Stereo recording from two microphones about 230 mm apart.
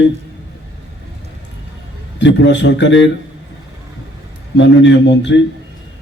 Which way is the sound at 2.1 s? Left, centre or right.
Left.